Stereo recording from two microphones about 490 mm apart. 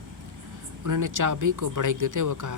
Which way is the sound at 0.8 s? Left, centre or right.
Right.